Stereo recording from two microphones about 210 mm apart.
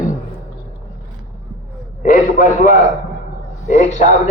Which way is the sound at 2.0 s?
40° left (ahead or behind).